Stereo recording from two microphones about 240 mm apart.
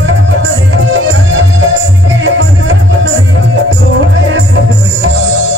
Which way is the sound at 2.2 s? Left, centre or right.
Right.